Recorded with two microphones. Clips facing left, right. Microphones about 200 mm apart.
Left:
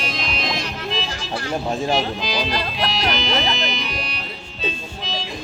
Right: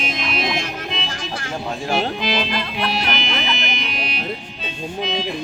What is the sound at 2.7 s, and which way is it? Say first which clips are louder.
Music: even; 55° right (ahead or behind).